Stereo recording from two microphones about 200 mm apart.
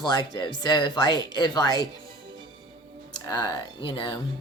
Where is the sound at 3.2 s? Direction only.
20° left (ahead or behind).